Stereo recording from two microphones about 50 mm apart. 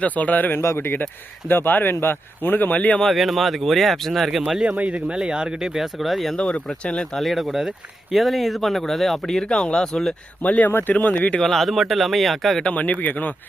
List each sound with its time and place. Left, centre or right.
0.0 s speech: left
0.6 s speech: left
3.0 s speech: centre
4.8 s speech: right; by 6.3 s centre
6.3 s speech: left
7.2 s speech: centre
10.4 s speech: left
10.7 s speech: left
11.3 s speech: centre
12.7 s speech: left